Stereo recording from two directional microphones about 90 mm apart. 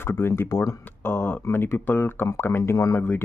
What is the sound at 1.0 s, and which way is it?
Speech, 25° left (ahead or behind).